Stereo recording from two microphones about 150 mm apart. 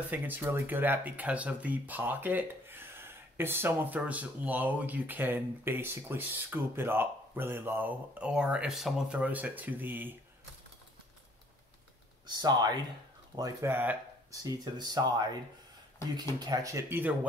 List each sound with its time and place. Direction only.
0.1 s speech: 10° right (ahead or behind)
12.4 s speech: 25° right (ahead or behind)
14.4 s speech: 25° right (ahead or behind)